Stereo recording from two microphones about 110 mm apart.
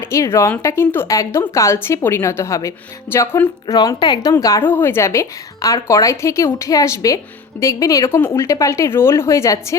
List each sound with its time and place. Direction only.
0.0 s a woman's voice: 25° left (ahead or behind)
3.7 s a woman's voice: 35° left (ahead or behind)
4.6 s a woman's voice: 20° left (ahead or behind)